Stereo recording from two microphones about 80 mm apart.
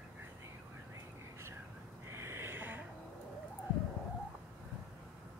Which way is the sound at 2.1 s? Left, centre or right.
Right.